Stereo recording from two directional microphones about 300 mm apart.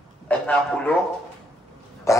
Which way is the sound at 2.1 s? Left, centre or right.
Centre.